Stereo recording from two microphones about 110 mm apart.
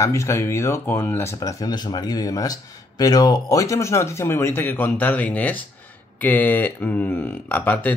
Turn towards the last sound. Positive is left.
turn(degrees=15)  # may be behind; listen again after turning